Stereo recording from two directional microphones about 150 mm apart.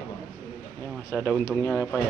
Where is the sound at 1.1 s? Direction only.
15° left (ahead or behind).